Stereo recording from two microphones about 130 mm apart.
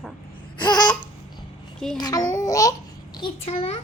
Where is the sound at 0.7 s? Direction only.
35° left (ahead or behind).